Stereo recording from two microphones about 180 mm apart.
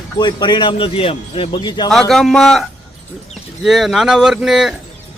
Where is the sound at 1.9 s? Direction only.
5° left (ahead or behind).